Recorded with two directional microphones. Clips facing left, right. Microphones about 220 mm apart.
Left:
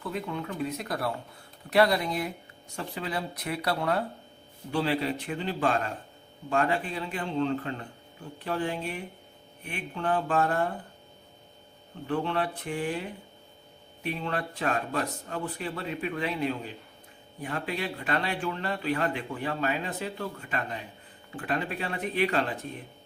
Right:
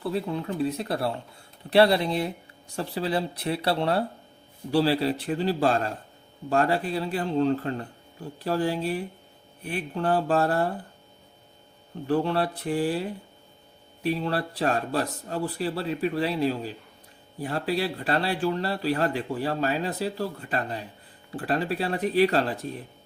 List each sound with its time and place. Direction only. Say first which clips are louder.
0.0 s speech: right 5 dB; 35° right (ahead or behind)
12.0 s speech: right 4 dB; 35° right (ahead or behind)